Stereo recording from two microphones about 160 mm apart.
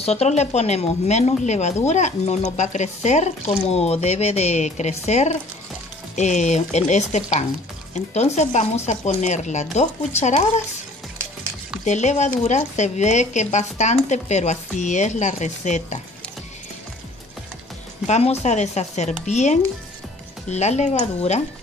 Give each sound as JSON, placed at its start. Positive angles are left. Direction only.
{"t": 0.0, "sound": "a woman's voice", "side_deg": 40}
{"t": 11.8, "sound": "a woman's voice", "side_deg": 45}
{"t": 18.0, "sound": "a woman's voice", "side_deg": 45}